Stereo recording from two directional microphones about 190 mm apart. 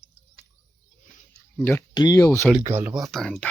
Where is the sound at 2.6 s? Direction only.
15° right (ahead or behind).